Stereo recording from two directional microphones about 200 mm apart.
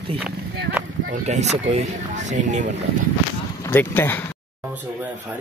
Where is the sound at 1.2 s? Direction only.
35° right (ahead or behind).